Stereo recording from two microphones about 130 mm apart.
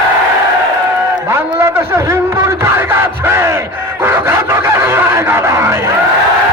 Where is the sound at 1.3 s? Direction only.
20° right (ahead or behind).